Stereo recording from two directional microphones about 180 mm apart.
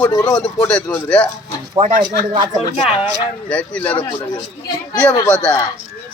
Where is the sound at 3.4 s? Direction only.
5° left (ahead or behind).